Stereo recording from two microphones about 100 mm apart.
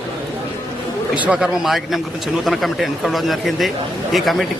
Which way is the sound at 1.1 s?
15° right (ahead or behind).